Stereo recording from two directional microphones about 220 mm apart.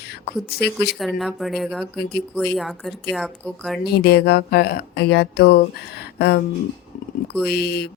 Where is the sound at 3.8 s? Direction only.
45° left (ahead or behind).